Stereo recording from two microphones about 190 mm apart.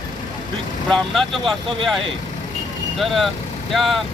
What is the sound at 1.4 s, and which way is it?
Speech, 25° right (ahead or behind).